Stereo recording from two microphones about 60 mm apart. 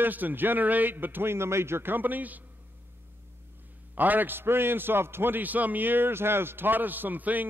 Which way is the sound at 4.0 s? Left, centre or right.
Right.